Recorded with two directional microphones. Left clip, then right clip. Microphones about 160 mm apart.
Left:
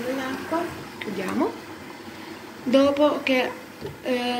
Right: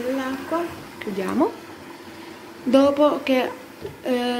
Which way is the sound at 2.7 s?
25° right (ahead or behind).